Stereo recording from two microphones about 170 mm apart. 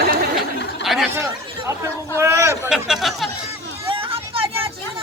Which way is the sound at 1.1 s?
15° right (ahead or behind).